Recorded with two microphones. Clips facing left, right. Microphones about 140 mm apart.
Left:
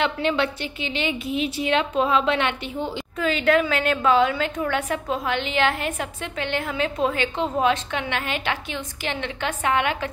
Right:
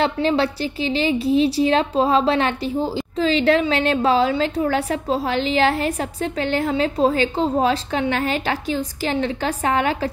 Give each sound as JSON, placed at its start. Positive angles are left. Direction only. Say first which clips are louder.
{"t": 0.0, "sound": "a woman's voice", "louder": "right 4 dB", "side_deg": -35}